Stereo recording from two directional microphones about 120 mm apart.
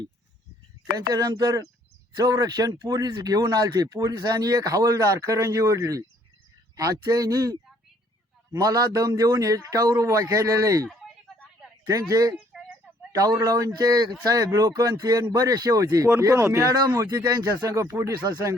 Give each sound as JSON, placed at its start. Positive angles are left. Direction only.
{"t": 1.1, "sound": "speech", "side_deg": -30}
{"t": 11.9, "sound": "speech", "side_deg": -30}